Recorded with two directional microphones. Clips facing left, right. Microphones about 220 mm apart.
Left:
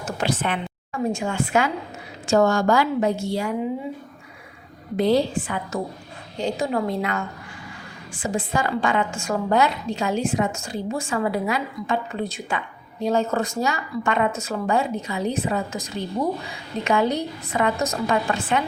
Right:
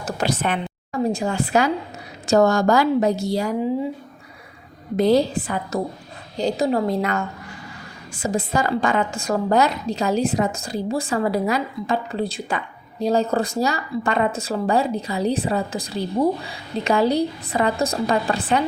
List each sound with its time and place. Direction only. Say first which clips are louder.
0.0 s a sound: right 2 dB; 40° right (ahead or behind)
2.2 s a woman's voice: right 2 dB; 40° right (ahead or behind)
4.9 s a woman's voice: right 2 dB; 40° right (ahead or behind)